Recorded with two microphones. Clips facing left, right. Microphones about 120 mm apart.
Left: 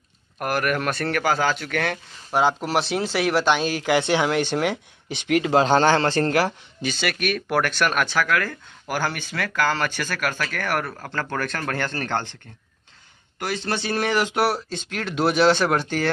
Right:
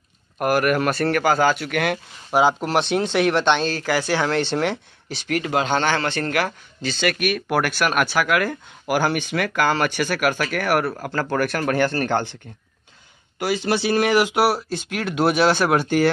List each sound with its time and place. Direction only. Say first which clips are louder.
0.4 s speech: right 5 dB; 5° right (ahead or behind); by 5.6 s 20° left (ahead or behind)
5.6 s a man's voice: left 3 dB; 35° left (ahead or behind)
6.8 s speech: right 3 dB; 10° left (ahead or behind)
7.2 s speech: right 1 dB; 5° right (ahead or behind)
13.4 s speech: right 5 dB; 10° right (ahead or behind)